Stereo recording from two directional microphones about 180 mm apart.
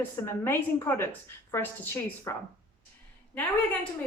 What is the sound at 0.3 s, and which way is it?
Speech, 15° left (ahead or behind).